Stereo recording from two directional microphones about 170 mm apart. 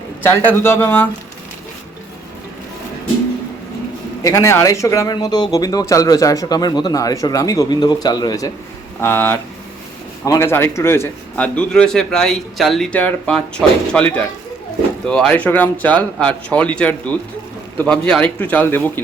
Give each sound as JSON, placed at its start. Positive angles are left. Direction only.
{"t": 0.3, "sound": "a man's voice", "side_deg": 15}
{"t": 4.2, "sound": "speech", "side_deg": 15}
{"t": 9.0, "sound": "a man's voice", "side_deg": 10}